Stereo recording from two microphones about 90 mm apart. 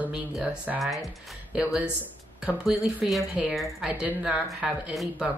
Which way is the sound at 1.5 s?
10° right (ahead or behind).